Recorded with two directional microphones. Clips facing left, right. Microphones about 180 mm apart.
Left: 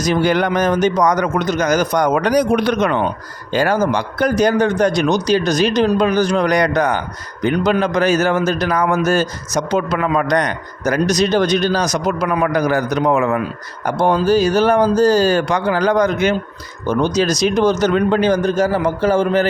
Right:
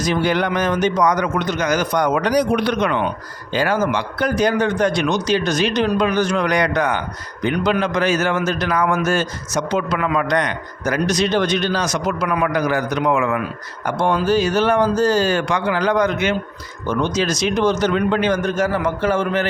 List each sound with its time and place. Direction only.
0.0 s a man's voice: 45° left (ahead or behind)